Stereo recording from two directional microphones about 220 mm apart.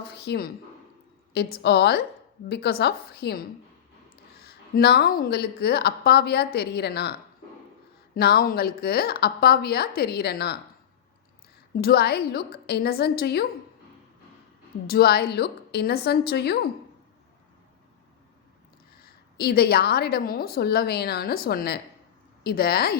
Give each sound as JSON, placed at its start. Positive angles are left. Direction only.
{"t": 0.1, "sound": "a sound", "side_deg": 45}
{"t": 1.3, "sound": "a woman's voice", "side_deg": 45}
{"t": 4.4, "sound": "a woman's voice", "side_deg": 45}
{"t": 8.1, "sound": "a woman's voice", "side_deg": 45}
{"t": 11.8, "sound": "a woman's voice", "side_deg": 45}
{"t": 14.8, "sound": "a woman's voice", "side_deg": 45}
{"t": 19.4, "sound": "a woman's voice", "side_deg": 45}